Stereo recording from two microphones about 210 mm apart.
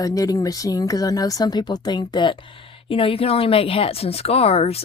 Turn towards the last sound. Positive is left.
turn(degrees=30)  # may be behind; listen again after turning